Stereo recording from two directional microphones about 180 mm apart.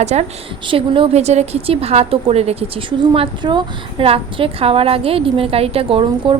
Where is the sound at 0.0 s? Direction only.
40° right (ahead or behind).